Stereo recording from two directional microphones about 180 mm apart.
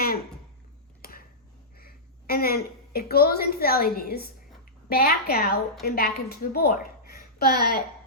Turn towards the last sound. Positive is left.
turn(degrees=60)  # may be behind; listen again after turning